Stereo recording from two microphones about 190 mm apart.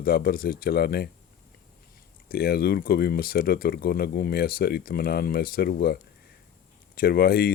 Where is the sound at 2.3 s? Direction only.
55° left (ahead or behind).